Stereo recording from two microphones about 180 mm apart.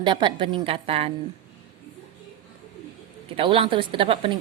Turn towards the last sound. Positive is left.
turn(degrees=-30)  # may be behind; listen again after turning